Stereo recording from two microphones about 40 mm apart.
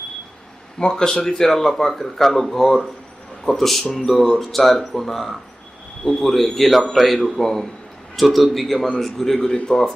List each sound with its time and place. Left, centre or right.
0.8 s speech: left
1.3 s speech: centre